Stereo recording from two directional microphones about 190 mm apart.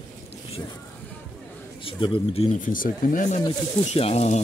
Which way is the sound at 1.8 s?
30° left (ahead or behind).